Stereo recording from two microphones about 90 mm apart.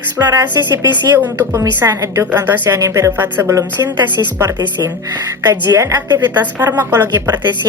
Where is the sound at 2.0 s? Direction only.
30° right (ahead or behind).